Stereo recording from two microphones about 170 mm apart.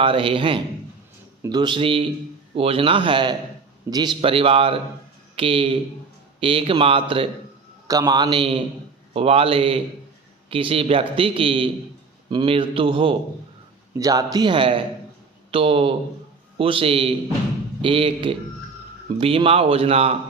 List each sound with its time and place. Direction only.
0.0 s a man's voice: 30° right (ahead or behind)
7.9 s a man's voice: 20° right (ahead or behind)
13.9 s a man's voice: 20° right (ahead or behind)